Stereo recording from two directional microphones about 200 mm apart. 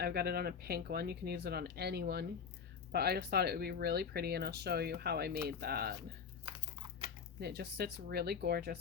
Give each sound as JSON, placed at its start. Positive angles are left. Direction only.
{"t": 0.0, "sound": "speech", "side_deg": -50}
{"t": 7.3, "sound": "speech", "side_deg": -55}